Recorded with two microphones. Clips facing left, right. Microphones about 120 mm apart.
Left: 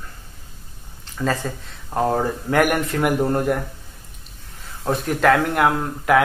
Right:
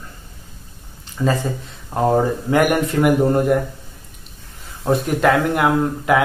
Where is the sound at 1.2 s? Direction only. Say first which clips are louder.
Right 3 dB; 5° right (ahead or behind).